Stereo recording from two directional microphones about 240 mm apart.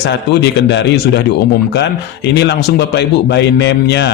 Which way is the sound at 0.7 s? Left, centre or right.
Left.